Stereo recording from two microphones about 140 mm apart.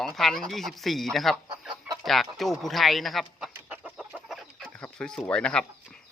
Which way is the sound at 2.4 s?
Centre (ahead or behind).